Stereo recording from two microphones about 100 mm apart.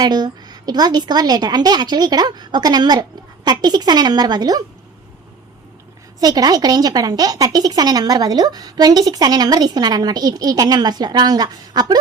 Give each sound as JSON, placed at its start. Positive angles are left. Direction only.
{"t": 0.0, "sound": "a woman's voice", "side_deg": -45}
{"t": 6.1, "sound": "a woman's voice", "side_deg": -40}